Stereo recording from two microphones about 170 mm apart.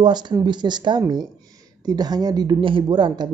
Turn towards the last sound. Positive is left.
turn(degrees=-25)  # may be behind; listen again after turning